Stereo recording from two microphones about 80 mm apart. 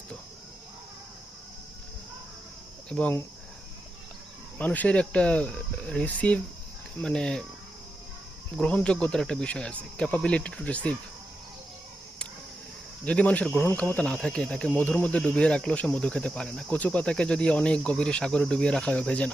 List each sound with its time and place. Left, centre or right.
4.5 s speech: centre
8.5 s speech: centre
13.1 s speech: centre